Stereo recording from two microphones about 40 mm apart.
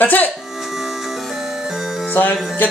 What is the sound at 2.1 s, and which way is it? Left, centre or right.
Music, left.